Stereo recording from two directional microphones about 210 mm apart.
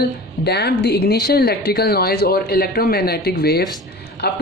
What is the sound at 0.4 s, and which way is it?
A woman's voice, 50° left (ahead or behind).